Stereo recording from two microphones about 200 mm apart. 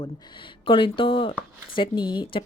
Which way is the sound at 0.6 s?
25° left (ahead or behind).